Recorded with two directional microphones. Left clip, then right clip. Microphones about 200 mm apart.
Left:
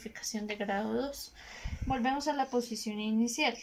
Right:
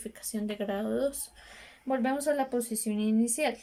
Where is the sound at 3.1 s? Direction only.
15° right (ahead or behind).